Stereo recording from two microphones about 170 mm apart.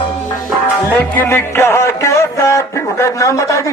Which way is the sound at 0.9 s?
10° left (ahead or behind).